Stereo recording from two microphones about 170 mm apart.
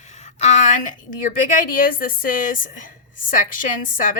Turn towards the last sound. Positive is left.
turn(degrees=50)  # may be behind; listen again after turning